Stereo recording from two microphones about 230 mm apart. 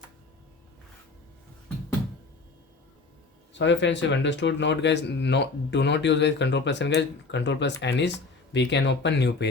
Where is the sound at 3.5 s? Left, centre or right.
Left.